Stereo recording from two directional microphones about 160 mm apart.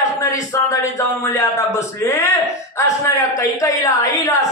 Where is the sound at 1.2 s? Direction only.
20° left (ahead or behind).